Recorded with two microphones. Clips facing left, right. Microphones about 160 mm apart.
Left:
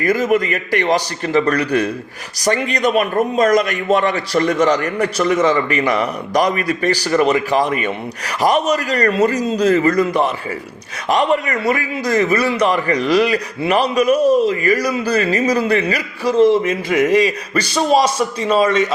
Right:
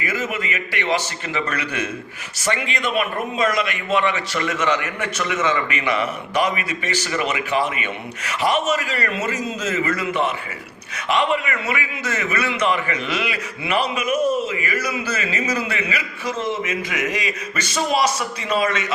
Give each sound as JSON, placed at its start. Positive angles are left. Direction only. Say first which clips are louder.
{"t": 0.0, "sound": "a man's voice", "louder": "left 10 dB", "side_deg": 40}